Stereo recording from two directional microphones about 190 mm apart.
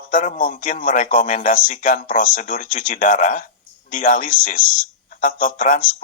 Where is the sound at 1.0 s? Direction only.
30° left (ahead or behind).